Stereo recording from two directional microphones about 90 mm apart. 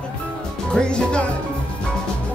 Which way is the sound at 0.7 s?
10° left (ahead or behind).